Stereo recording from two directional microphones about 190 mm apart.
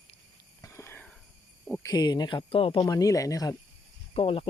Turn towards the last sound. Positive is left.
turn(degrees=30)  # may be behind; listen again after turning